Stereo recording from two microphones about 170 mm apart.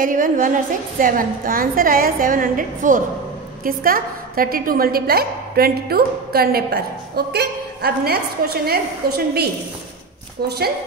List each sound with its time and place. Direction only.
0.0 s a woman's voice: 55° right (ahead or behind); by 10.7 s 70° right (ahead or behind)